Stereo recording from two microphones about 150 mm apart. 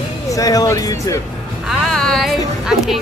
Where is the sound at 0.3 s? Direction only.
25° left (ahead or behind).